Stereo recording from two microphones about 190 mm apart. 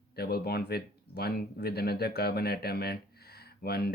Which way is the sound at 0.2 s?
55° left (ahead or behind).